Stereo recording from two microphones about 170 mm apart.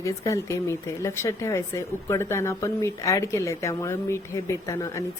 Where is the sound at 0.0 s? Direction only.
20° left (ahead or behind).